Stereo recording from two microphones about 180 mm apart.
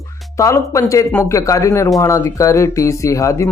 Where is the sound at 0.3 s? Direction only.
15° left (ahead or behind).